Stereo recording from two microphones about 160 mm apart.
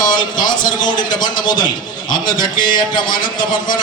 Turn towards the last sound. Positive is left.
turn(degrees=25)  # may be behind; listen again after turning